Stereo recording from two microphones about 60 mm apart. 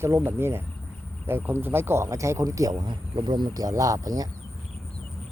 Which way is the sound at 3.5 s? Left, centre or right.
Right.